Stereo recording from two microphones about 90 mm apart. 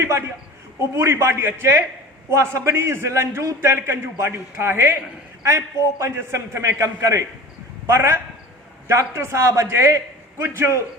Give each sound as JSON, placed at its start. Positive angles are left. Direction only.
{"t": 0.0, "sound": "a man's voice", "side_deg": -30}